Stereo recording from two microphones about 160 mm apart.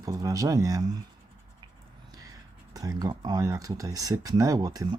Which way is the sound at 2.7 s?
20° right (ahead or behind).